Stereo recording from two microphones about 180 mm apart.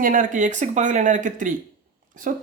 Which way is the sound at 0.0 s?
50° right (ahead or behind).